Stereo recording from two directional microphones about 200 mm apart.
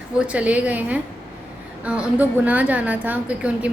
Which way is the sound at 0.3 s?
5° right (ahead or behind).